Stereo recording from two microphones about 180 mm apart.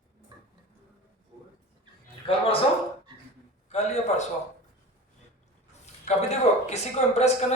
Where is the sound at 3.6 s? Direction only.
40° left (ahead or behind).